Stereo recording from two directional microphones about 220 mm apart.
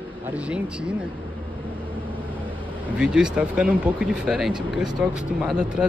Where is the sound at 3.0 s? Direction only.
5° right (ahead or behind).